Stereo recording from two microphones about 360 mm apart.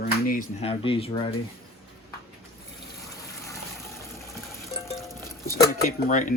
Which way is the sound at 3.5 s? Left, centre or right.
Centre.